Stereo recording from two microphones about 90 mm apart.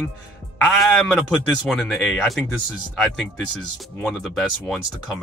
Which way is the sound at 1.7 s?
5° right (ahead or behind).